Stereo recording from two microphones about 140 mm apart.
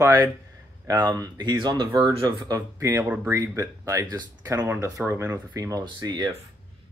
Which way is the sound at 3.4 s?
25° right (ahead or behind).